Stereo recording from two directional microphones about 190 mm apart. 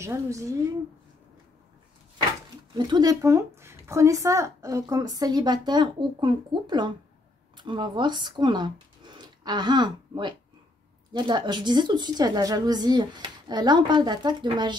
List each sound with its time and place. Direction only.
0.0 s a woman's voice: 15° right (ahead or behind)
2.8 s speech: 20° right (ahead or behind)